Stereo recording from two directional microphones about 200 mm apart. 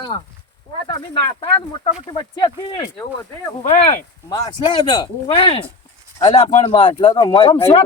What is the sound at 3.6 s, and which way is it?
Speech, 35° left (ahead or behind).